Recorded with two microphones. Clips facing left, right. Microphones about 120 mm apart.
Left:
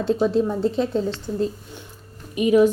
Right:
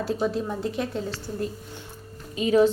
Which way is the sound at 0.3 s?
30° left (ahead or behind).